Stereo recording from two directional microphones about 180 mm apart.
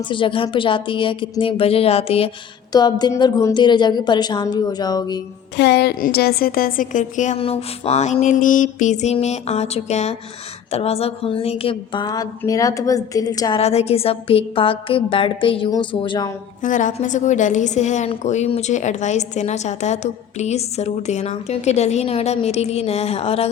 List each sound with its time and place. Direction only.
0.0 s speech: 25° left (ahead or behind)
2.7 s speech: 20° left (ahead or behind)
5.5 s a woman's voice: 65° left (ahead or behind); by 13.6 s 20° left (ahead or behind)
13.6 s speech: 35° left (ahead or behind)
16.6 s a woman's voice: 45° left (ahead or behind)